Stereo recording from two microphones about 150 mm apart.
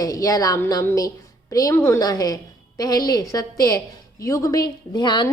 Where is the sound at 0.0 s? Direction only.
25° left (ahead or behind).